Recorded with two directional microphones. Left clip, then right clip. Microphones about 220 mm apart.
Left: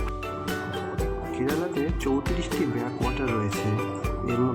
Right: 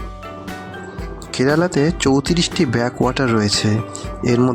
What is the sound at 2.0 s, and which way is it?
Speech, 55° right (ahead or behind).